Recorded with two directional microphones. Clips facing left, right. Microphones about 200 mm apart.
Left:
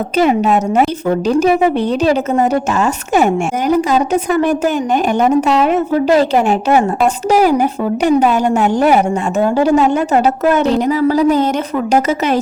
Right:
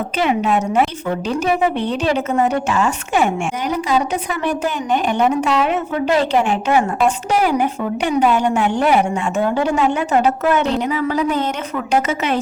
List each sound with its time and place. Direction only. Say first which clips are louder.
0.2 s a woman's voice: left 5 dB; 40° left (ahead or behind)